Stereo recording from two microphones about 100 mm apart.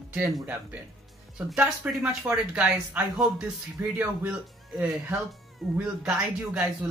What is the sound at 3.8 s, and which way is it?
Speech, 20° right (ahead or behind).